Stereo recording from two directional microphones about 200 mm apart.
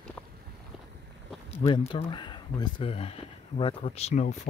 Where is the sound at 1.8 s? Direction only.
25° left (ahead or behind).